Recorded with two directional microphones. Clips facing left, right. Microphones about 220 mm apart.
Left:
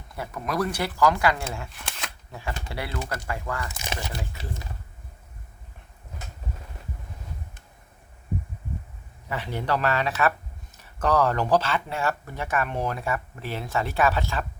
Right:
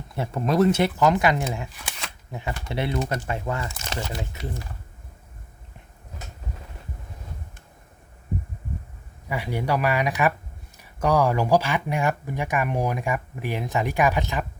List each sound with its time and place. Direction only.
0.2 s speech: 30° right (ahead or behind)
3.7 s crumpling: 15° left (ahead or behind)
4.1 s speech: 25° right (ahead or behind)
9.3 s speech: 10° right (ahead or behind)